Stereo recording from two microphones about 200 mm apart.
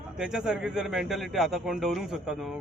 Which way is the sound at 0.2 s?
Centre (ahead or behind).